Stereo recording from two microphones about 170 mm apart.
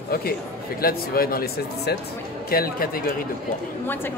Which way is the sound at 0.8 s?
60° left (ahead or behind).